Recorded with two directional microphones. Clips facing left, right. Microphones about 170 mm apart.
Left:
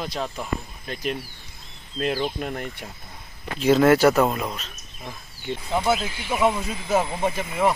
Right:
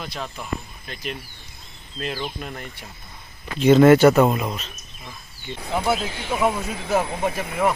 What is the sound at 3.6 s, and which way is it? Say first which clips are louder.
Speech: right 4 dB; centre (ahead or behind).